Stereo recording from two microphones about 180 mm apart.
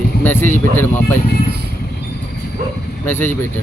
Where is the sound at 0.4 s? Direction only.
45° right (ahead or behind).